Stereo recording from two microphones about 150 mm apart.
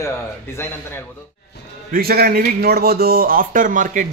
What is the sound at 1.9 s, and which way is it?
Speech, 85° right.